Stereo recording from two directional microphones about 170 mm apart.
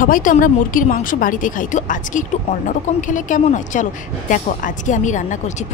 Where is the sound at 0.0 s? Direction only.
50° left (ahead or behind).